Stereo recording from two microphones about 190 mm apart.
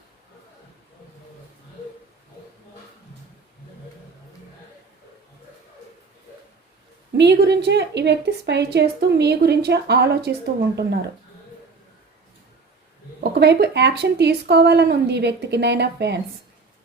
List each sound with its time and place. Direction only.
7.2 s a woman's voice: 65° right (ahead or behind)
13.3 s a woman's voice: 60° right (ahead or behind)